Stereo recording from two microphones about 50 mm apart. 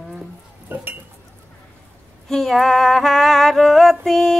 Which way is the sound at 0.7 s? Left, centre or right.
Right.